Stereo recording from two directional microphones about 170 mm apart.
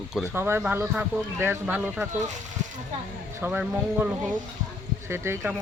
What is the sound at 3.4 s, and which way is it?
Speech, 10° right (ahead or behind).